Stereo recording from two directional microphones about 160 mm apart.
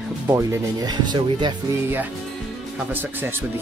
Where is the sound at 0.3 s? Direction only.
20° right (ahead or behind).